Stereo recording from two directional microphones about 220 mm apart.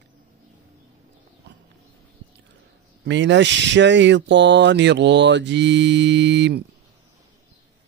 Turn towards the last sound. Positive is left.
turn(degrees=-50)  # may be behind; listen again after turning